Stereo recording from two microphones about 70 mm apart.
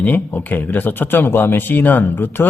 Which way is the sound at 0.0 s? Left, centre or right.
Left.